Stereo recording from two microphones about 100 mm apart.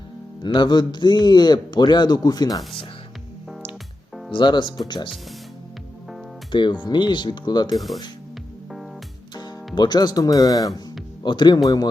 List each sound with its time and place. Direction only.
0.4 s speech: 50° left (ahead or behind)
4.3 s speech: 50° left (ahead or behind)
6.5 s speech: 50° left (ahead or behind)
9.7 s speech: 45° left (ahead or behind)
11.2 s speech: 50° left (ahead or behind)